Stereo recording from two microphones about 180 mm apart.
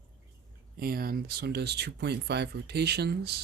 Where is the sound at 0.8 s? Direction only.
55° right (ahead or behind).